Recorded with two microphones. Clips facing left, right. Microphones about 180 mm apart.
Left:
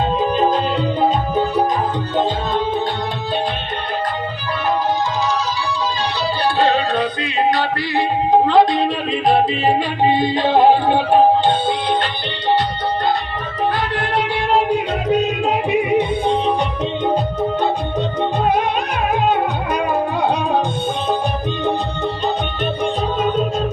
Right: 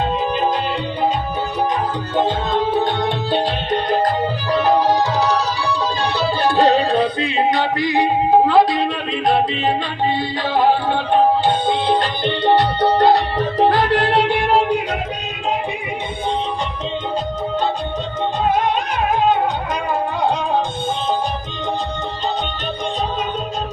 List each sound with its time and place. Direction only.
6.6 s music: 35° right (ahead or behind); by 8.0 s 20° right (ahead or behind)
8.3 s music: 5° right (ahead or behind)
10.0 s music: 15° left (ahead or behind)
12.5 s music: 65° right (ahead or behind)
13.7 s music: 40° right (ahead or behind)